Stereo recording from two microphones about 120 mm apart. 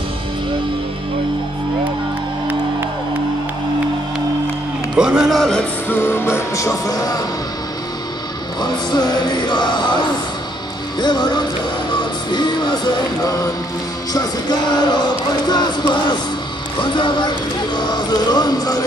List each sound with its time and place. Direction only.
4.9 s a man's voice: 5° right (ahead or behind)
5.9 s music: 20° left (ahead or behind)
8.5 s speech: 35° left (ahead or behind)
11.0 s speech: 35° left (ahead or behind)
11.9 s music: 40° left (ahead or behind)
14.8 s speech: 40° left (ahead or behind)